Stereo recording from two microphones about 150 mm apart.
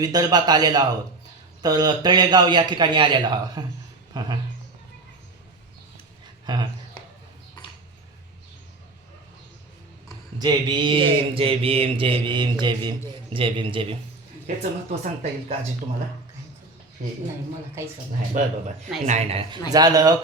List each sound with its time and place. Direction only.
0.0 s a man's voice: 25° right (ahead or behind)
6.4 s a sound: 30° right (ahead or behind)
10.3 s mantra: 30° right (ahead or behind)
14.4 s speech: 50° right (ahead or behind)
18.4 s a man's voice: 60° right (ahead or behind)
19.0 s speech: 50° right (ahead or behind)
19.7 s a man's voice: 25° right (ahead or behind)